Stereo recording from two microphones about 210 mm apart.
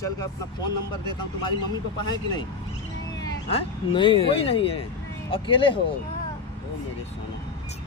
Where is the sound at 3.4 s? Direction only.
25° left (ahead or behind).